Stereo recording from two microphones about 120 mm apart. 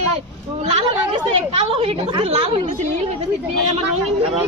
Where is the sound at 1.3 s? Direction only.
50° right (ahead or behind).